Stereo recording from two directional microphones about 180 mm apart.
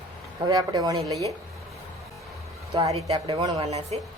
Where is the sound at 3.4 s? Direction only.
20° right (ahead or behind).